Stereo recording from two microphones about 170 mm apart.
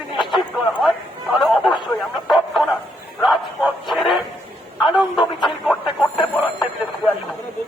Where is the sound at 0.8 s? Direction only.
Centre (ahead or behind).